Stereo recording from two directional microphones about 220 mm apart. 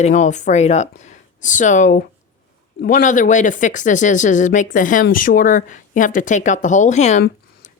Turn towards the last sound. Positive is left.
turn(degrees=30)  # may be behind; listen again after turning